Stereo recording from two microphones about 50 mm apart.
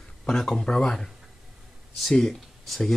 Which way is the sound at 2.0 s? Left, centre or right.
Centre.